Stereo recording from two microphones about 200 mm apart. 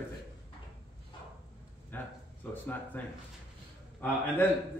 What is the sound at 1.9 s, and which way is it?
Speech, 10° left (ahead or behind).